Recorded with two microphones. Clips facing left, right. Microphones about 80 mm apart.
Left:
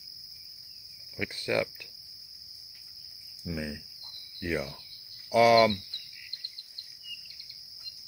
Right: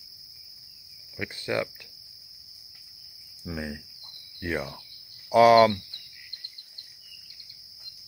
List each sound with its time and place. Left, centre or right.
1.1 s cricket: right
3.4 s cricket: right
4.4 s speech: right